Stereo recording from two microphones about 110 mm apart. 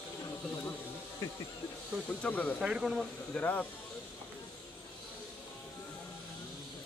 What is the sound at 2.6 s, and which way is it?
Speech, 5° right (ahead or behind).